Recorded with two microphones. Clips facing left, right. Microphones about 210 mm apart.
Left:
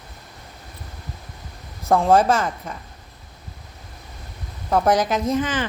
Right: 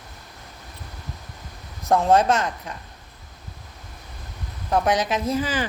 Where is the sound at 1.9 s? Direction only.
Centre (ahead or behind).